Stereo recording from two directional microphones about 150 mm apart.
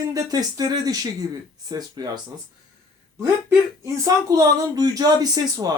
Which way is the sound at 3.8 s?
20° right (ahead or behind).